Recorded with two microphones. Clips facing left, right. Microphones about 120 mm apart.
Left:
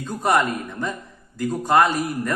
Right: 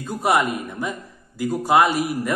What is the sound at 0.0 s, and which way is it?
Speech, 5° right (ahead or behind).